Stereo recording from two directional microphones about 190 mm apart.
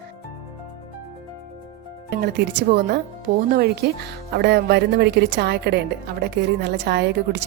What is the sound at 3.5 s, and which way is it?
Speech, 60° right (ahead or behind).